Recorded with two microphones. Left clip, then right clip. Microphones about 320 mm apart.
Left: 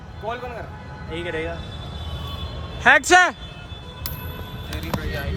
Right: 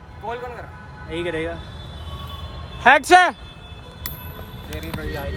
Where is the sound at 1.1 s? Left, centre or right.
Right.